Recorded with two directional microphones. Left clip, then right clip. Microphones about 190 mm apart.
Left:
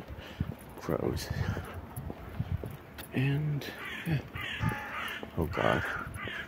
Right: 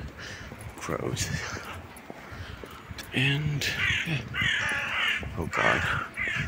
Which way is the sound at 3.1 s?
Centre (ahead or behind).